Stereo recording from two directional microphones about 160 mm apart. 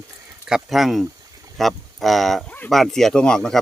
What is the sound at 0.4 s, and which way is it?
Speech, centre (ahead or behind).